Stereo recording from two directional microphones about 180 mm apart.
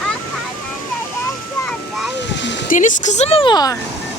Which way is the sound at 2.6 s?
45° left (ahead or behind).